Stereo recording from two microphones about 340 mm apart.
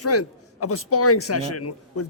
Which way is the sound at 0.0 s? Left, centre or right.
Left.